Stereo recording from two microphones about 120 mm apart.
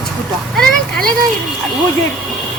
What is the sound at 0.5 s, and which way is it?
Speech, 5° left (ahead or behind).